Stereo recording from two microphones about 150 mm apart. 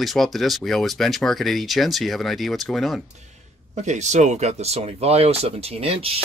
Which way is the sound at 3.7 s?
50° right (ahead or behind).